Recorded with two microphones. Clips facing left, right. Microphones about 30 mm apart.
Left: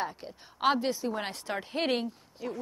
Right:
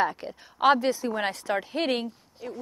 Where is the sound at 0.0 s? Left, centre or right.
Right.